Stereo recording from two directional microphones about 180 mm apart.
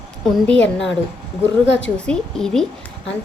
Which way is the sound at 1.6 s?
90° left.